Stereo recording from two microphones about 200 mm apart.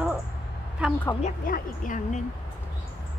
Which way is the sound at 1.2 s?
40° left (ahead or behind).